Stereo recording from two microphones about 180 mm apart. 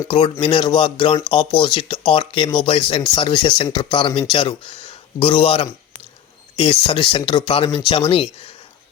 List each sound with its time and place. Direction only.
0.1 s speech: 25° left (ahead or behind)
6.8 s speech: 30° left (ahead or behind)